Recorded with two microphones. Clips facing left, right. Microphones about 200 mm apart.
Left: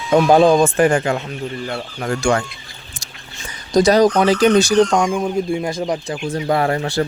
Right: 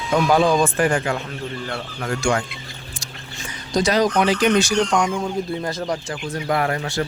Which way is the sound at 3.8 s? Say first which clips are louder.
Left 5 dB; 40° left (ahead or behind).